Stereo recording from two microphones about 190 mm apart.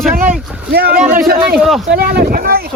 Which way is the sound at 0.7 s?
55° right (ahead or behind).